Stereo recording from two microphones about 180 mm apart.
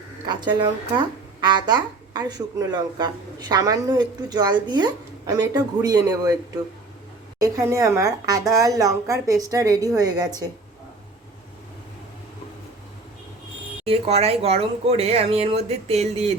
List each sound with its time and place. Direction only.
0.3 s a woman's voice: 25° right (ahead or behind)
7.3 s a woman's voice: 20° right (ahead or behind)
13.8 s speech: 35° right (ahead or behind)